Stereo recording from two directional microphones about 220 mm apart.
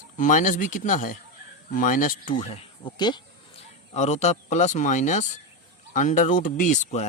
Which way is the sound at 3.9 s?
30° left (ahead or behind).